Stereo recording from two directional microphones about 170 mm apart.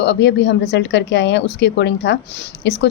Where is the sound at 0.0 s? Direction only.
90° left.